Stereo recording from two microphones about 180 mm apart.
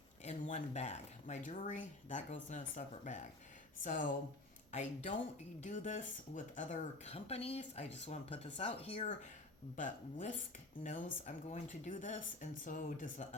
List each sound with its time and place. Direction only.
0.5 s speech: 40° left (ahead or behind)
9.7 s speech: 45° left (ahead or behind)